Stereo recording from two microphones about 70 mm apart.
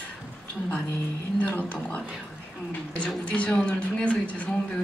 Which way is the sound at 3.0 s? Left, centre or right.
Centre.